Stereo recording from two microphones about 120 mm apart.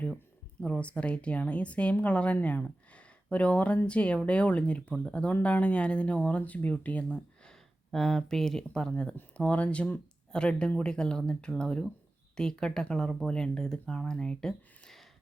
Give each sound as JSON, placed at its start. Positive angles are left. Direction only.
{"t": 0.6, "sound": "a woman's voice", "side_deg": 10}